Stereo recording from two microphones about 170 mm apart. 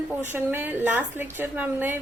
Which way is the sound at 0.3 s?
10° right (ahead or behind).